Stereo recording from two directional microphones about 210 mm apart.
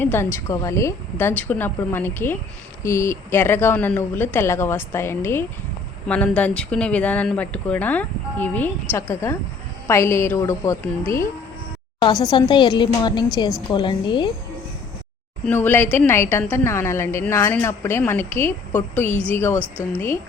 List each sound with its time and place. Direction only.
0.0 s speech: 10° left (ahead or behind)
11.9 s speech: 20° left (ahead or behind)
15.4 s speech: 10° left (ahead or behind)